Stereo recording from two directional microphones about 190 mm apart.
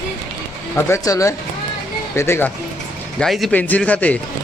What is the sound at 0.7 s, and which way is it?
A man's voice, 15° left (ahead or behind).